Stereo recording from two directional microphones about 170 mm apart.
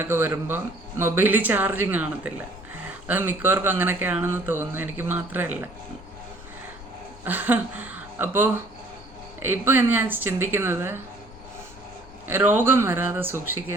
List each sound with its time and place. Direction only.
0.0 s speech: 15° right (ahead or behind)
7.3 s speech: 10° right (ahead or behind)
12.5 s speech: 15° right (ahead or behind)